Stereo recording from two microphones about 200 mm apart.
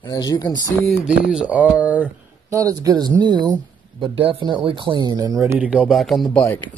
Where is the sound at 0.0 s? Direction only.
20° left (ahead or behind).